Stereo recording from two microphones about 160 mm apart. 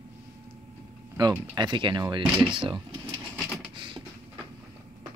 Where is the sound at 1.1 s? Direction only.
25° right (ahead or behind).